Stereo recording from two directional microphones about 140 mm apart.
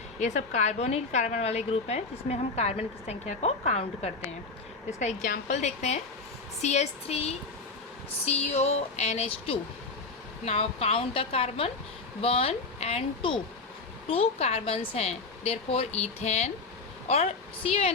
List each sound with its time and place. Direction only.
0.2 s a woman's voice: 55° left (ahead or behind)